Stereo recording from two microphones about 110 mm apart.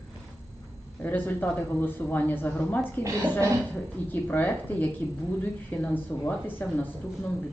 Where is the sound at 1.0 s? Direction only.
15° left (ahead or behind).